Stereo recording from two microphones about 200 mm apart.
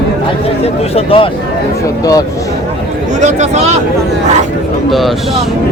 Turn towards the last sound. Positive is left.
turn(degrees=-35)  # may be behind; listen again after turning